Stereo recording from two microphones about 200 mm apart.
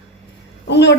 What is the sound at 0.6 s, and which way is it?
Speech, 60° left (ahead or behind).